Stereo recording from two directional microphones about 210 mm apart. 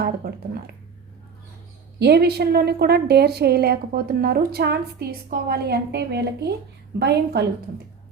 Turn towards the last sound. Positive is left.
turn(degrees=-50)  # may be behind; listen again after turning